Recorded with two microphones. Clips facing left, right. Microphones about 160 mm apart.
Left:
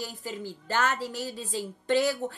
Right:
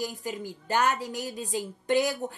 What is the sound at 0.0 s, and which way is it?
A woman's voice, 15° right (ahead or behind).